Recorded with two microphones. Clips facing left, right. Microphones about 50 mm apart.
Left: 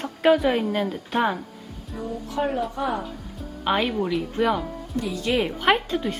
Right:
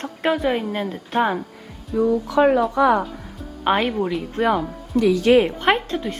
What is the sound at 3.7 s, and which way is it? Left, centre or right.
Speech, right.